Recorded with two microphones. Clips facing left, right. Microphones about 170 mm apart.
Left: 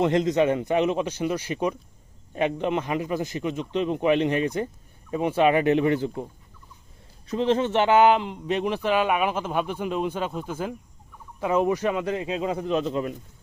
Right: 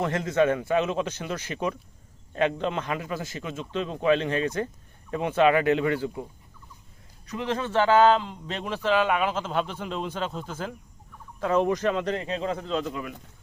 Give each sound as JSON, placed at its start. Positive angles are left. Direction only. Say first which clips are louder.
{"t": 0.0, "sound": "a man's voice", "louder": "left 3 dB", "side_deg": 20}
{"t": 7.3, "sound": "a man's voice", "louder": "left 7 dB", "side_deg": 25}